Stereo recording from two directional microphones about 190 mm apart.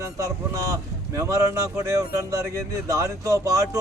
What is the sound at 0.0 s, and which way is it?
A man's voice, 15° right (ahead or behind).